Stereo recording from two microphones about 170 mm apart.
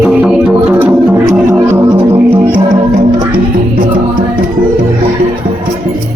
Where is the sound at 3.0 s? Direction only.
30° right (ahead or behind).